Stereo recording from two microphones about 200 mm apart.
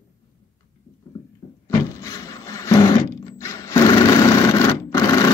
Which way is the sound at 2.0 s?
15° left (ahead or behind).